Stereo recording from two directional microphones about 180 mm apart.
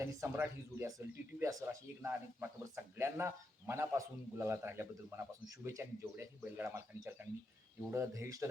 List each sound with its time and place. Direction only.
0.0 s speech: 15° right (ahead or behind)